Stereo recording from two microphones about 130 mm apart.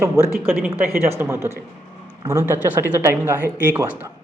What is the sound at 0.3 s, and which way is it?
Speech, 15° right (ahead or behind).